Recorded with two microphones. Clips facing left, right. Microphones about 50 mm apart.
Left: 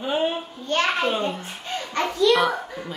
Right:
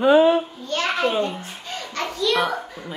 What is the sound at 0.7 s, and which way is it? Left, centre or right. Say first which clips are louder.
Speech: left 3 dB; left.